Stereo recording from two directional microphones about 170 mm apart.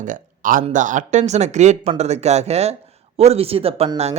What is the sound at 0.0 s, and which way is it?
Speech, 50° right (ahead or behind).